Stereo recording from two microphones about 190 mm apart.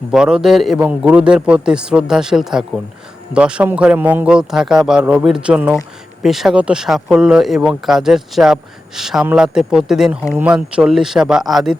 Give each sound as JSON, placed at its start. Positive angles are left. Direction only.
{"t": 0.1, "sound": "a man's voice", "side_deg": -5}